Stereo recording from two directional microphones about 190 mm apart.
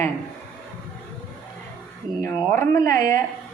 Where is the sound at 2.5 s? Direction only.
15° left (ahead or behind).